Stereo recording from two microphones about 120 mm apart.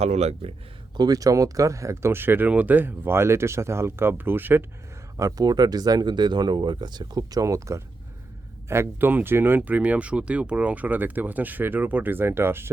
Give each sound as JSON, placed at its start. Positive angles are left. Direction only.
{"t": 0.0, "sound": "speech", "side_deg": -65}
{"t": 0.9, "sound": "speech", "side_deg": -30}
{"t": 5.1, "sound": "speech", "side_deg": -30}